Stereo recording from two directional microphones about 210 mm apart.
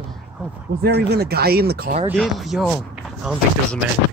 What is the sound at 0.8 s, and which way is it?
Speech, 50° right (ahead or behind).